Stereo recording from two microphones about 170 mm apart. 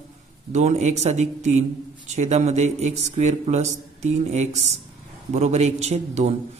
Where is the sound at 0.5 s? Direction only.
40° right (ahead or behind).